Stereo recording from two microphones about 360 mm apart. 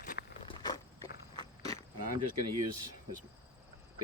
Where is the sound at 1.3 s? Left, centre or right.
Centre.